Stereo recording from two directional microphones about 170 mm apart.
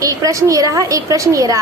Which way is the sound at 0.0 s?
20° right (ahead or behind).